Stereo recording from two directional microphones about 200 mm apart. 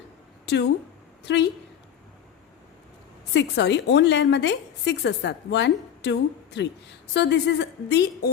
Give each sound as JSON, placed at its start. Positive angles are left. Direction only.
{"t": 0.4, "sound": "a woman's voice", "side_deg": 55}
{"t": 3.3, "sound": "a woman's voice", "side_deg": 60}